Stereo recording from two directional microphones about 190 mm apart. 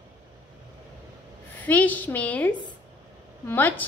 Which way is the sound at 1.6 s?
10° left (ahead or behind).